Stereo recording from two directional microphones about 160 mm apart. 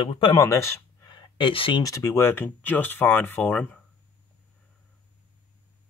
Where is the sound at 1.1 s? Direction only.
30° left (ahead or behind).